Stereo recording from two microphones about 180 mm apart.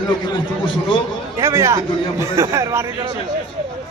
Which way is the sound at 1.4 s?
15° right (ahead or behind).